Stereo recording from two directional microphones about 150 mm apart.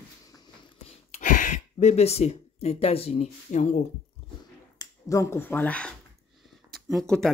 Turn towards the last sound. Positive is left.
turn(degrees=5)  # may be behind; listen again after turning